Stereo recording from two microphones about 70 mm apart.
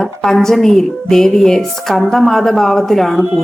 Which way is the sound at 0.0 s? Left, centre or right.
Centre.